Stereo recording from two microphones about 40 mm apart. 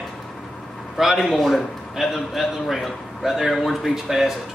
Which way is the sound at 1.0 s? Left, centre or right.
Centre.